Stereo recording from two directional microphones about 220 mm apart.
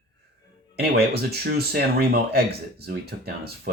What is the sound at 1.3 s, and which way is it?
Speech, 45° right (ahead or behind).